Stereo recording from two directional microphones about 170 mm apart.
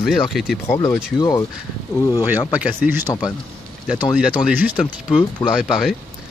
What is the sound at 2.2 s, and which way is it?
Speech, 10° right (ahead or behind).